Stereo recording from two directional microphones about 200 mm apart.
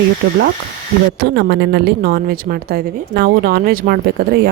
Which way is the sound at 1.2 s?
55° right (ahead or behind).